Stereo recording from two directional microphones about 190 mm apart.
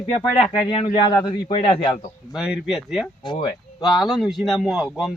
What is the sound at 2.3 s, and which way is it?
A man's voice, centre (ahead or behind).